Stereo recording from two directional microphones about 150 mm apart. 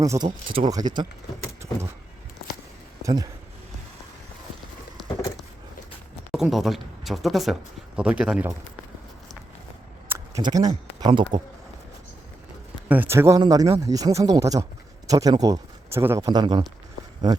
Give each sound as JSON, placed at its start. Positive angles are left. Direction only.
{"t": 0.0, "sound": "speech", "side_deg": -20}
{"t": 0.4, "sound": "speech", "side_deg": -35}
{"t": 3.0, "sound": "speech", "side_deg": -25}
{"t": 6.3, "sound": "speech", "side_deg": 0}
{"t": 10.1, "sound": "a sound", "side_deg": -15}
{"t": 10.4, "sound": "speech", "side_deg": -25}
{"t": 12.9, "sound": "speech", "side_deg": -15}